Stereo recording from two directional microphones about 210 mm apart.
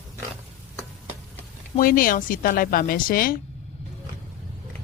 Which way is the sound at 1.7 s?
40° left (ahead or behind).